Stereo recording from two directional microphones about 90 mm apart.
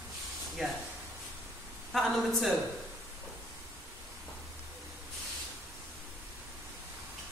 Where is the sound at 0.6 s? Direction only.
Centre (ahead or behind).